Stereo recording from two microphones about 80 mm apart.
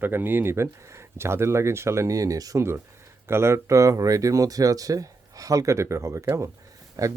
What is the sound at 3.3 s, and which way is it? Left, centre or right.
Speech, right.